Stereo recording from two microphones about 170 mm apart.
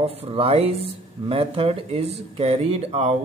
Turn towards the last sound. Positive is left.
turn(degrees=-40)  # may be behind; listen again after turning